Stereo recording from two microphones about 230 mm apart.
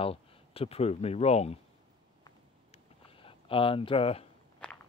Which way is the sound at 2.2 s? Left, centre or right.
Left.